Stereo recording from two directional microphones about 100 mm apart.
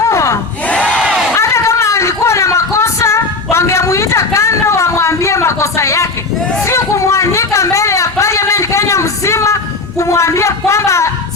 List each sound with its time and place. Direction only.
0.0 s crowd: 30° left (ahead or behind)
0.7 s crowd: 10° left (ahead or behind)
1.4 s a sound: 30° left (ahead or behind)